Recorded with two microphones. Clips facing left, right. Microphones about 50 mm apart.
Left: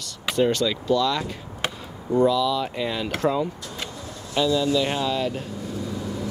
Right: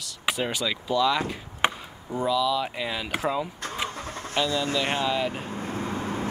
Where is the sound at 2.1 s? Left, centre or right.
Centre.